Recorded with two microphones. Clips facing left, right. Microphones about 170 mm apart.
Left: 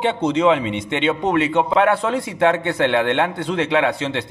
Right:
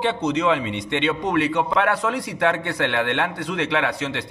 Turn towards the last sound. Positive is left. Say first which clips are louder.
# left 4 dB
turn(degrees=25)  # may be behind; listen again after turning